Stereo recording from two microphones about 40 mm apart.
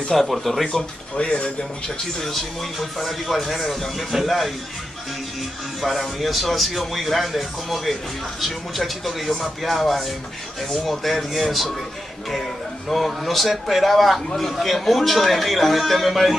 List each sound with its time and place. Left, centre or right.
0.1 s speech: centre
0.7 s speech: left
2.1 s speech: centre
5.8 s speech: centre